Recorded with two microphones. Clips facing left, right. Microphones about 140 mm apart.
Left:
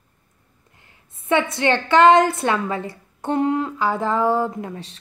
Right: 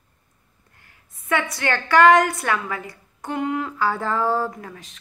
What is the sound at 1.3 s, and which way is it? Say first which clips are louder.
Speech: left 4 dB; 20° left (ahead or behind).